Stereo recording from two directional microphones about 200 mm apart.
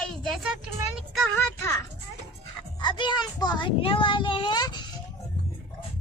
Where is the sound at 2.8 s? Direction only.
20° left (ahead or behind).